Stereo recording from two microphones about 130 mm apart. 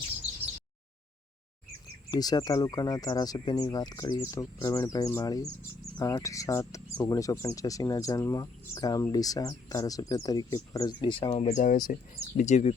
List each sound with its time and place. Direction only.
2.0 s speech: 30° left (ahead or behind)
11.5 s speech: 90° left
11.9 s speech: 75° left (ahead or behind)